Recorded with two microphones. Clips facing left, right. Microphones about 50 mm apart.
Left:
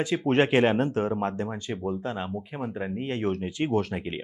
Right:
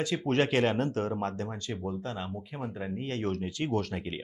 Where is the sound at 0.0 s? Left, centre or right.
Left.